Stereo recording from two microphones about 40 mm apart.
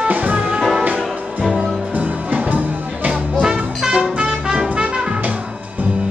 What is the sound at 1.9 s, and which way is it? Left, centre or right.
Music, right.